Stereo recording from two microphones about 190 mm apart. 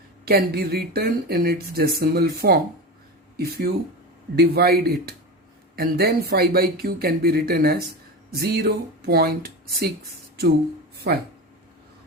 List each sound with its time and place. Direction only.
0.3 s speech: 55° right (ahead or behind)